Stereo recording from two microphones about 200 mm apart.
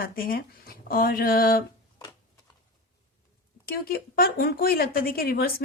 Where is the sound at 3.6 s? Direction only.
50° left (ahead or behind).